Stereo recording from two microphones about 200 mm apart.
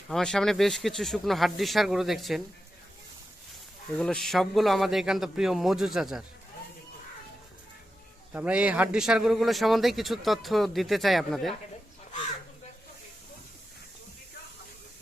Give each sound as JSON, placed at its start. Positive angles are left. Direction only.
{"t": 0.1, "sound": "a man's voice", "side_deg": 5}
{"t": 3.9, "sound": "a man's voice", "side_deg": 5}
{"t": 8.3, "sound": "a man's voice", "side_deg": -5}